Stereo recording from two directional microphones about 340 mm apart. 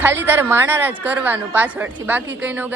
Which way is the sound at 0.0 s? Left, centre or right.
Centre.